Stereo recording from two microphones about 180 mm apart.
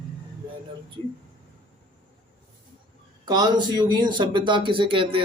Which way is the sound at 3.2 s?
25° right (ahead or behind).